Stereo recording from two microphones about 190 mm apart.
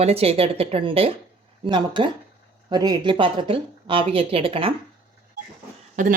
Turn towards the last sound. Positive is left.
turn(degrees=-40)  # may be behind; listen again after turning